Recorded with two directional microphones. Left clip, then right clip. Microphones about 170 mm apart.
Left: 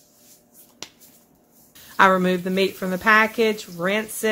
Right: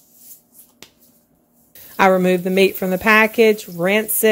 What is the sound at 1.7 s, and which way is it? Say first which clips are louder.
Speech: right 2 dB; 40° right (ahead or behind).